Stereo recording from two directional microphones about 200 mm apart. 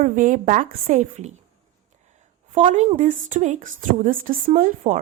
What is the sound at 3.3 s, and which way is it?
A woman's voice, 40° right (ahead or behind).